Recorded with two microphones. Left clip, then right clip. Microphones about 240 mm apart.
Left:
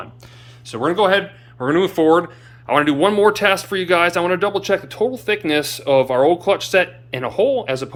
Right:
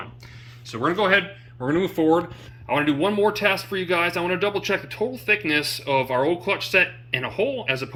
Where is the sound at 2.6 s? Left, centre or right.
Left.